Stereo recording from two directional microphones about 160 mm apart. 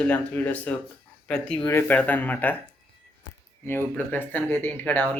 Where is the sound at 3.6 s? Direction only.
15° left (ahead or behind).